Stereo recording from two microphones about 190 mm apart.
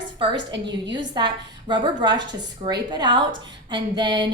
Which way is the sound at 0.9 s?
25° right (ahead or behind).